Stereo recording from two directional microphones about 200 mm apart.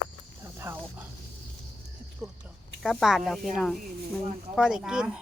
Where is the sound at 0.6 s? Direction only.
10° right (ahead or behind).